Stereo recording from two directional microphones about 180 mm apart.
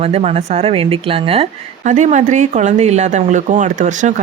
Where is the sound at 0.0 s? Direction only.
35° right (ahead or behind).